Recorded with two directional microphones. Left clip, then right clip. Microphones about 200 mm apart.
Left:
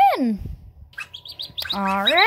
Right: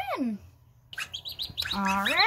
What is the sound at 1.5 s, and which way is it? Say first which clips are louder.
Speech: left 5 dB; 45° left (ahead or behind).